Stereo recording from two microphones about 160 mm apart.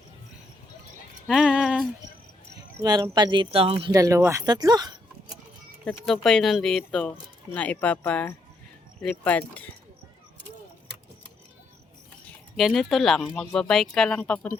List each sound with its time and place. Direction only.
1.3 s music: 5° right (ahead or behind)
2.6 s speech: 25° right (ahead or behind)
3.9 s speech: 20° right (ahead or behind)
5.8 s speech: 5° left (ahead or behind)
12.5 s speech: centre (ahead or behind)